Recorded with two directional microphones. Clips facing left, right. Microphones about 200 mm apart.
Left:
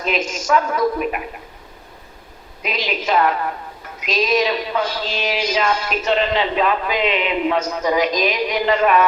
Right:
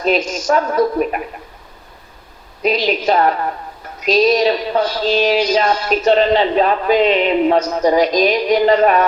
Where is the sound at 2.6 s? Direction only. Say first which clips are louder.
Right 8 dB; 35° right (ahead or behind).